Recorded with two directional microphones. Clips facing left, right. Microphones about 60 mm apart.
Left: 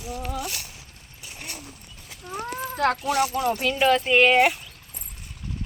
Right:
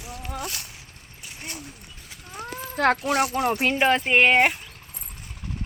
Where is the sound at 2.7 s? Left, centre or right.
Right.